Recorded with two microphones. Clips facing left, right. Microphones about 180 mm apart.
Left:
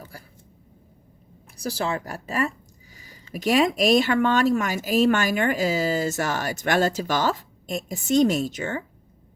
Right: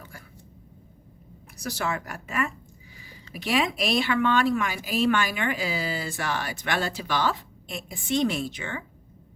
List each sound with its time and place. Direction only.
1.5 s speech: 30° left (ahead or behind)